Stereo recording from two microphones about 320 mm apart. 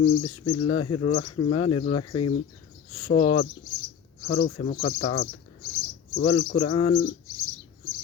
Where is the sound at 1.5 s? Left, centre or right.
Centre.